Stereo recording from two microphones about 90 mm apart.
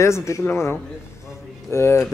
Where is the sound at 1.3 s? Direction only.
30° left (ahead or behind).